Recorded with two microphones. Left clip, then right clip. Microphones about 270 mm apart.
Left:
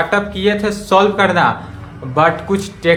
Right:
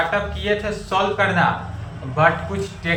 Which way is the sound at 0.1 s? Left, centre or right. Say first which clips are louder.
Left 6 dB; left.